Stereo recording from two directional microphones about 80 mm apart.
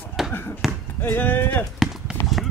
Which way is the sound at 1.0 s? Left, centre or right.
Left.